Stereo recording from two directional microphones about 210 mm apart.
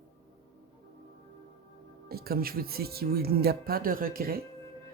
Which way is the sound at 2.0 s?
45° right (ahead or behind).